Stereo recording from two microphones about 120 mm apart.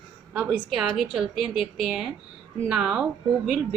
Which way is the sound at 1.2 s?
Centre (ahead or behind).